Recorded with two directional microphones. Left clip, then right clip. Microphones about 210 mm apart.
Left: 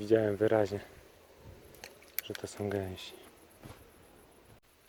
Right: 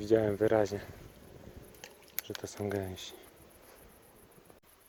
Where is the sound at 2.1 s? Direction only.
Centre (ahead or behind).